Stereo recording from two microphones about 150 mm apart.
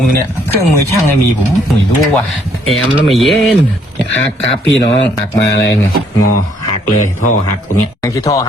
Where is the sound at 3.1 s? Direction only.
Centre (ahead or behind).